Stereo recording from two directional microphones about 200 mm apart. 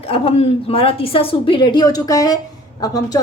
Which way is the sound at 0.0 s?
30° left (ahead or behind).